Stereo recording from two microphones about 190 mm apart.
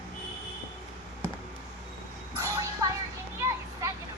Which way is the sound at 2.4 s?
20° right (ahead or behind).